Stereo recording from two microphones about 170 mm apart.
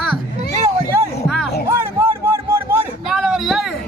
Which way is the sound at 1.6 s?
15° right (ahead or behind).